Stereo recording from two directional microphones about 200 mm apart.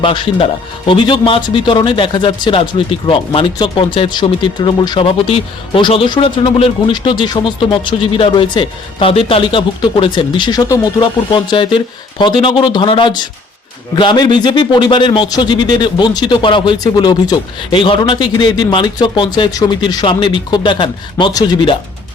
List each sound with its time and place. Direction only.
0.0 s speech: 25° left (ahead or behind)